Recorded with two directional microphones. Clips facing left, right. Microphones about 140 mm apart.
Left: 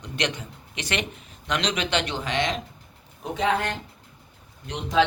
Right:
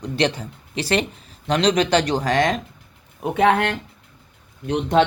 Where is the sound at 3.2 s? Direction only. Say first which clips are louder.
Right 7 dB; 60° right (ahead or behind).